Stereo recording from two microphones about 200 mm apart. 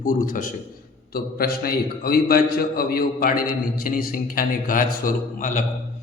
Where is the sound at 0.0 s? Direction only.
45° left (ahead or behind).